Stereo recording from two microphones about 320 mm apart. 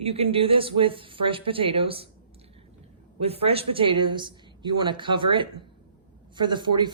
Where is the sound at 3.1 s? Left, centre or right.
Centre.